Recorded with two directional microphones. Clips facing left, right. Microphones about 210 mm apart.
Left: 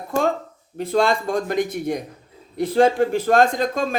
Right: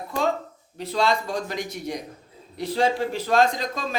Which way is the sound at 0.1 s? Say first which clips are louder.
Left 5 dB; 45° left (ahead or behind).